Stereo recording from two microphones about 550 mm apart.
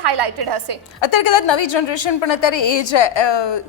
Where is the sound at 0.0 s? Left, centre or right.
Right.